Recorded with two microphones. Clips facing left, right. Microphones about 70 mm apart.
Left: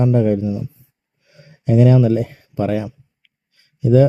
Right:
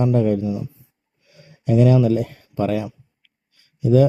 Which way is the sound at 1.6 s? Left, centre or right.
Left.